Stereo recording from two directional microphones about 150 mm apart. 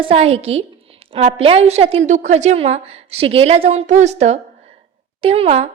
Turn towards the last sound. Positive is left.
turn(degrees=-45)  # may be behind; listen again after turning